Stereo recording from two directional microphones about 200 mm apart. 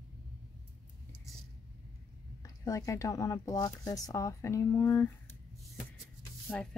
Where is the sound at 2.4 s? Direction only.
15° left (ahead or behind).